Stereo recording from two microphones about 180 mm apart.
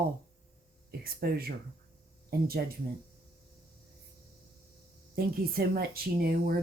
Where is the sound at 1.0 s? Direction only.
55° right (ahead or behind).